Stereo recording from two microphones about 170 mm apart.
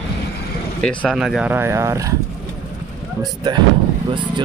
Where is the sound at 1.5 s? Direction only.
15° right (ahead or behind).